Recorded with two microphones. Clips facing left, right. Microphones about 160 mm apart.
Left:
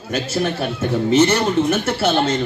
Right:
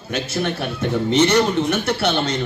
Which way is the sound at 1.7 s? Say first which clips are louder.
Left 2 dB; 5° left (ahead or behind).